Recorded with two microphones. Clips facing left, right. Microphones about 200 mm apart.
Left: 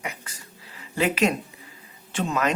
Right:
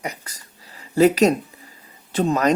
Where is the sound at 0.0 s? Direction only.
40° right (ahead or behind).